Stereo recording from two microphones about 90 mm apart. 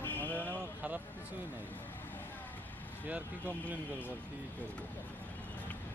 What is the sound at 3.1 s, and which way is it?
Speech, 15° right (ahead or behind).